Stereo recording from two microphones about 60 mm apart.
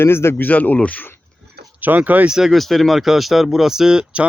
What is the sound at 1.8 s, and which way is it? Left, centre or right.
Speech, right.